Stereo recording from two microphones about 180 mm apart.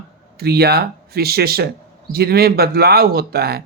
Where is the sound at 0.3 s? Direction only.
60° right (ahead or behind).